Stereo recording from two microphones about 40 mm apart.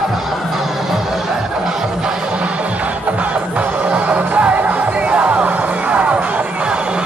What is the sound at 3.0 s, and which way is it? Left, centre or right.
Music, right.